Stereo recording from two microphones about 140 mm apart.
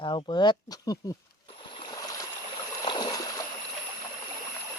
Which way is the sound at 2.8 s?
30° left (ahead or behind).